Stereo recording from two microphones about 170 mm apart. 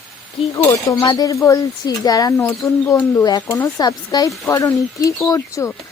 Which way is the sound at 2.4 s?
10° left (ahead or behind).